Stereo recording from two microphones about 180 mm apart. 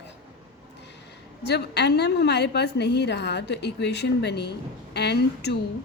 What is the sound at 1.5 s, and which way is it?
A woman's voice, 70° left (ahead or behind).